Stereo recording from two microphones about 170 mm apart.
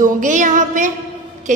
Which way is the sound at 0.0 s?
50° right (ahead or behind).